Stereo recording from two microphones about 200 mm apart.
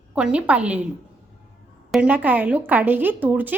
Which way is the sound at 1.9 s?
5° right (ahead or behind).